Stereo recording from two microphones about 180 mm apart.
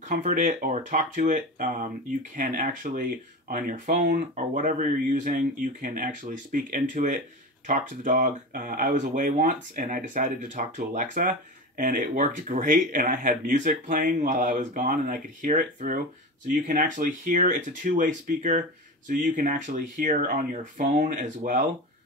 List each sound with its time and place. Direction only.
0.1 s speech: 45° right (ahead or behind)